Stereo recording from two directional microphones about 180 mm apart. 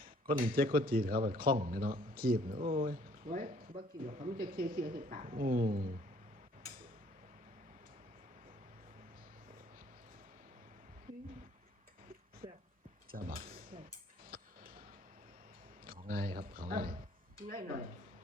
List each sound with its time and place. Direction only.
0.3 s speech: 55° right (ahead or behind)
13.1 s music: 50° right (ahead or behind)
15.9 s speech: 55° right (ahead or behind)